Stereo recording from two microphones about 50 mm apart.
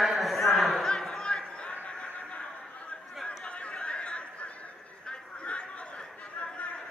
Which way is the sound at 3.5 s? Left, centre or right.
Left.